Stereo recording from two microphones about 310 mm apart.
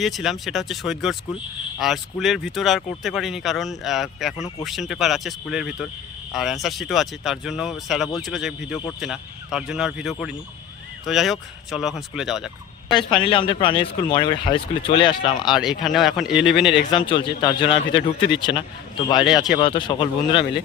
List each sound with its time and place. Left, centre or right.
0.0 s speech: centre
12.9 s speech: centre
15.5 s speech: centre
16.8 s speech: centre